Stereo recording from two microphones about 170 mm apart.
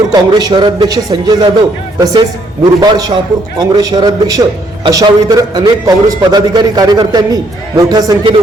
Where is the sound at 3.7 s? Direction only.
20° right (ahead or behind).